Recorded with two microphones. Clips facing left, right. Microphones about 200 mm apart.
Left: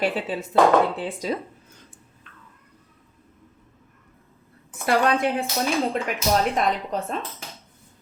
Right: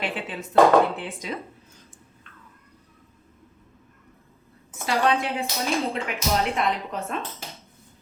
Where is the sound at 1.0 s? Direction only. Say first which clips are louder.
Left 6 dB; 35° left (ahead or behind).